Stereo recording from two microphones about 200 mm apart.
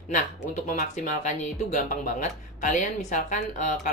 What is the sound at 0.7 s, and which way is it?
Speech, 40° left (ahead or behind).